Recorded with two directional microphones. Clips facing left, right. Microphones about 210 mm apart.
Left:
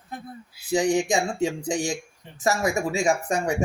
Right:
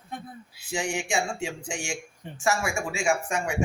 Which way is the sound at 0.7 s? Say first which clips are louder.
Left 8 dB; 35° left (ahead or behind).